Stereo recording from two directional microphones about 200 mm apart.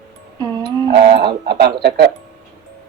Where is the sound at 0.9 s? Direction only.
50° right (ahead or behind).